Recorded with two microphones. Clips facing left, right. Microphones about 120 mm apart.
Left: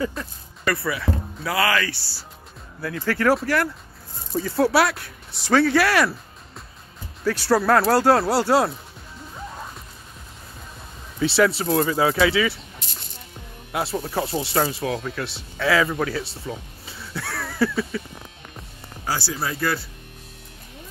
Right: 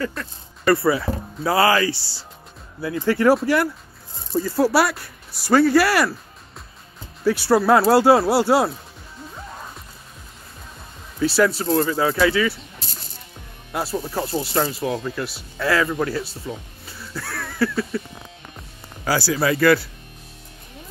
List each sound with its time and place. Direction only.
0.7 s speech: 30° right (ahead or behind)
2.8 s speech: 15° right (ahead or behind)
4.3 s speech: centre (ahead or behind)
7.2 s speech: 10° right (ahead or behind)
11.1 s speech: centre (ahead or behind)
13.7 s speech: centre (ahead or behind)
16.9 s a sound: centre (ahead or behind)
19.0 s speech: 90° right